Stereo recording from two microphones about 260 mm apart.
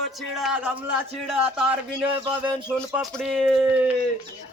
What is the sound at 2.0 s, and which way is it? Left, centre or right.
Speech, centre.